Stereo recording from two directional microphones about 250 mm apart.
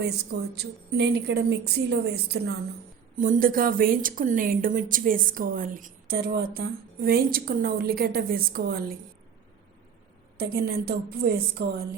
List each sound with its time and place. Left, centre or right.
0.0 s a woman's voice: right
10.3 s a woman's voice: right